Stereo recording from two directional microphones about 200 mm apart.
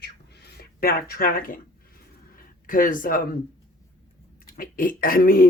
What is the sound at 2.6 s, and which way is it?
Speech, 40° left (ahead or behind).